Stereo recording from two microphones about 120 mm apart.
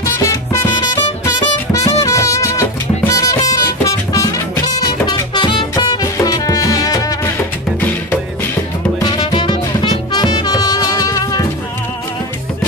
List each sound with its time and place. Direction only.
0.0 s music: 25° left (ahead or behind)
9.0 s music: 35° left (ahead or behind)